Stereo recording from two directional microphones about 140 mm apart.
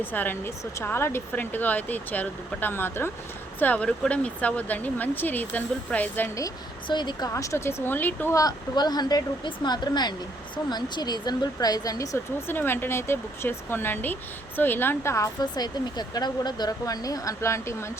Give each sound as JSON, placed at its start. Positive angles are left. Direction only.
{"t": 0.0, "sound": "speech", "side_deg": 15}
{"t": 6.8, "sound": "speech", "side_deg": 30}
{"t": 8.4, "sound": "speech", "side_deg": 30}